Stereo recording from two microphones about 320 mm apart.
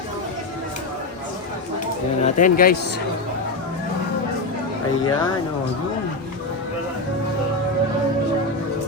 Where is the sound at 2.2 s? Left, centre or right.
Left.